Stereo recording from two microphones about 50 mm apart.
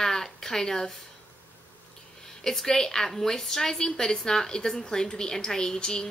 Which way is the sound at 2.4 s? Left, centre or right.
Centre.